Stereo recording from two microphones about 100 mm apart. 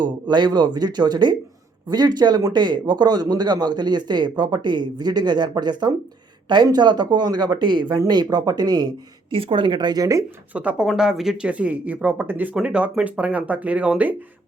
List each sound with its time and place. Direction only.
0.0 s a man's voice: 45° right (ahead or behind)
9.3 s a man's voice: 65° right (ahead or behind); by 10.2 s 35° right (ahead or behind)
10.5 s speech: 15° right (ahead or behind)